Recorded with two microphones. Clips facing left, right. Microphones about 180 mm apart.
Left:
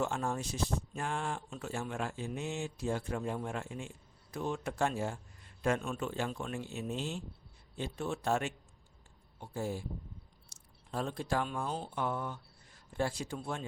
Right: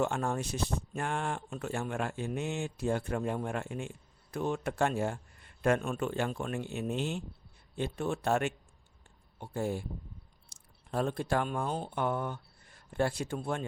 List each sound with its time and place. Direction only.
0.0 s speech: 60° right (ahead or behind)
10.9 s speech: 60° right (ahead or behind)